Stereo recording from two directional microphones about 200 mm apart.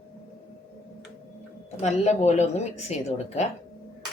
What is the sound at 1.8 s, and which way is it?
Speech, 35° left (ahead or behind).